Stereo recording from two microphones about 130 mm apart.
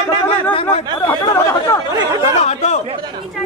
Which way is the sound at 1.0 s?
20° left (ahead or behind).